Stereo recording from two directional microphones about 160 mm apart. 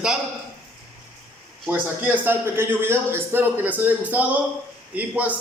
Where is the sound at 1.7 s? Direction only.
10° right (ahead or behind).